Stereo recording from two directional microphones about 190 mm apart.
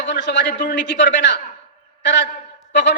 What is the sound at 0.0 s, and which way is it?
A man's voice, 65° left (ahead or behind).